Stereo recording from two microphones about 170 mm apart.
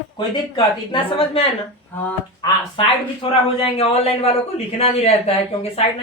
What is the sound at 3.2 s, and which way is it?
Speech, 35° left (ahead or behind).